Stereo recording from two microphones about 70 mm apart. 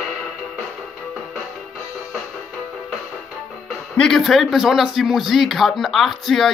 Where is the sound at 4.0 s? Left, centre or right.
Centre.